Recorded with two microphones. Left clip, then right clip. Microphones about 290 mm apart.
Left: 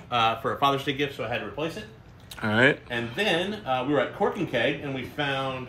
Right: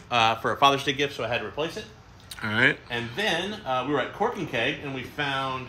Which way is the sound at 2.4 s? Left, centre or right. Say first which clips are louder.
Left 1 dB; centre.